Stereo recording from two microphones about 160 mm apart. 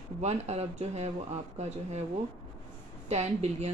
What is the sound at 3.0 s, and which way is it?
Speech, 40° right (ahead or behind).